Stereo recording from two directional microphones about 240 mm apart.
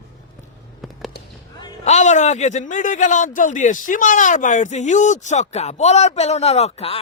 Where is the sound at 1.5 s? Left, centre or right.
Centre.